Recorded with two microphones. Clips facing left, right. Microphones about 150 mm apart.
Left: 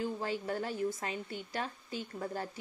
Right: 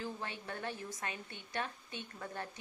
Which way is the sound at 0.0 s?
30° left (ahead or behind).